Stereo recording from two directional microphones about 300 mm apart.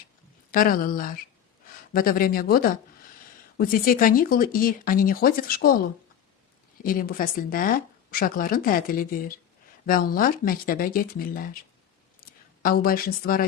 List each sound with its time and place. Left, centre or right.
0.5 s speech: left
6.8 s speech: left
12.2 s a sound: left
12.6 s speech: left